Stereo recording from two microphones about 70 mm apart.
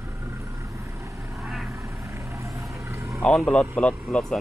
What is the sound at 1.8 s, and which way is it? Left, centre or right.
Vehicle, right.